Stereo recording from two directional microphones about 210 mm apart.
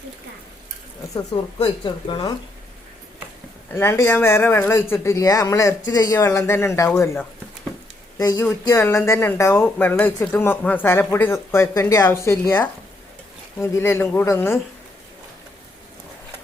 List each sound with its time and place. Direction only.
1.5 s speech: 25° left (ahead or behind)
3.7 s speech: 10° left (ahead or behind)